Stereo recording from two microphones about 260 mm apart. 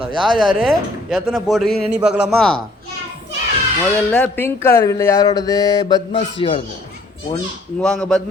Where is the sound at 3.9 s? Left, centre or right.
Centre; by 6.6 s left.